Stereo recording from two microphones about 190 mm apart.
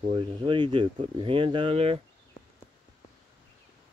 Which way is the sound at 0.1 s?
25° right (ahead or behind).